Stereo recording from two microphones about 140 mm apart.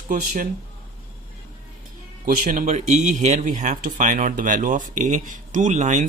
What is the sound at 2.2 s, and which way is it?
Speech, 70° right (ahead or behind).